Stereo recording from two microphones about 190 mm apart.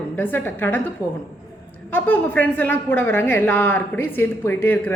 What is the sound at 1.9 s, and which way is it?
A woman's voice, 10° left (ahead or behind).